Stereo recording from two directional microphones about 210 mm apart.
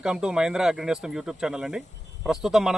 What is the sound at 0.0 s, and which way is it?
Speech, 5° right (ahead or behind).